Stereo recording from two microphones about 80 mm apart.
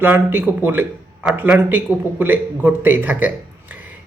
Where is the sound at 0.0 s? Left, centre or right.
Right.